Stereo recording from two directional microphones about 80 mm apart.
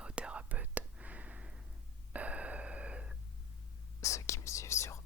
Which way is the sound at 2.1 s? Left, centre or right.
Centre.